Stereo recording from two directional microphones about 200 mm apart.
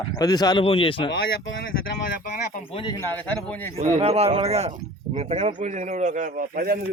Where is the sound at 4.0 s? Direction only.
30° right (ahead or behind).